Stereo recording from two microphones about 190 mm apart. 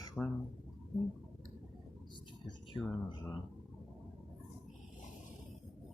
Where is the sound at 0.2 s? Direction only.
5° left (ahead or behind).